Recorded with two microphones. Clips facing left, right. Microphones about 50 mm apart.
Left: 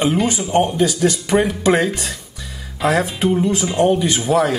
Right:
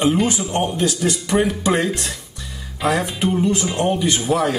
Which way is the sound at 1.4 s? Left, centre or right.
Centre.